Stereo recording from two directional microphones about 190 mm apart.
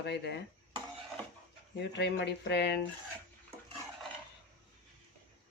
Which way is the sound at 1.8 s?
65° left (ahead or behind).